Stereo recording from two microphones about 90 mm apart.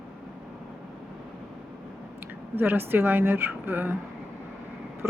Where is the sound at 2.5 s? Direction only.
25° right (ahead or behind).